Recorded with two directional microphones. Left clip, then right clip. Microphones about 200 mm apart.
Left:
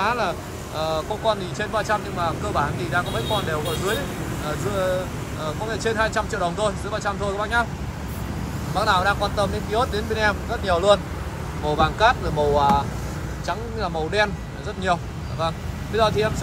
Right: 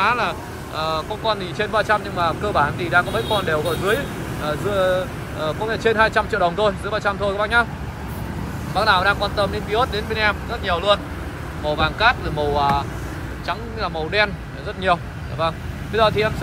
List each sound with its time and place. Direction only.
0.0 s speech: 15° left (ahead or behind)
8.7 s speech: 15° left (ahead or behind)
14.8 s vehicle: 15° left (ahead or behind)
16.0 s speech: 10° left (ahead or behind)